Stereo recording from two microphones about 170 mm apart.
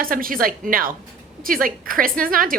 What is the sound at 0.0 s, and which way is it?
Speech, 55° right (ahead or behind).